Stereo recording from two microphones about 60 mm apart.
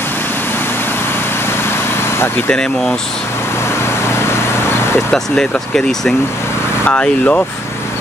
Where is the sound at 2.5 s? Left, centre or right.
Centre.